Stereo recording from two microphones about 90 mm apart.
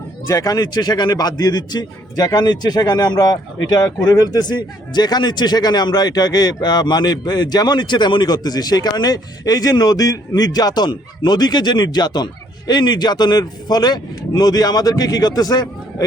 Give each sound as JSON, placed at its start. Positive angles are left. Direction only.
{"t": 0.3, "sound": "a man's voice", "side_deg": 40}